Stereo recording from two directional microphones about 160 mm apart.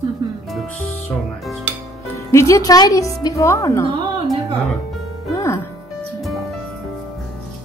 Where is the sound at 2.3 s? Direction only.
20° left (ahead or behind).